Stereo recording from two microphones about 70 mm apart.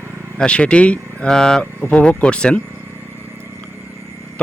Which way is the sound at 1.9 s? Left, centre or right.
Centre.